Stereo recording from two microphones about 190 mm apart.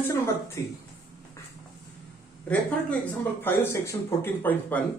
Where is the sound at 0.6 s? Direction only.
15° left (ahead or behind).